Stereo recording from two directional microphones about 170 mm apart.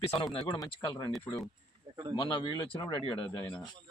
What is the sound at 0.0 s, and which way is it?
Speech, 35° left (ahead or behind).